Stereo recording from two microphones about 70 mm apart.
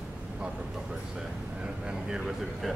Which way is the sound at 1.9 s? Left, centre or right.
Centre.